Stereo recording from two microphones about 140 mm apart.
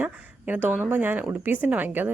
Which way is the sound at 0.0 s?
10° right (ahead or behind).